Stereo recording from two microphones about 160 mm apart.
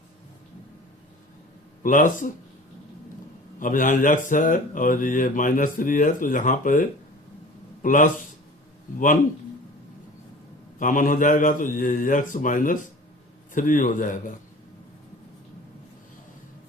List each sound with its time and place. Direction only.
1.8 s speech: 55° left (ahead or behind)
3.6 s a man's voice: 55° left (ahead or behind)
10.8 s a man's voice: 55° left (ahead or behind)